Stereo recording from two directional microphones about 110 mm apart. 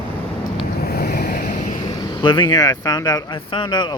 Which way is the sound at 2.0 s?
45° left (ahead or behind).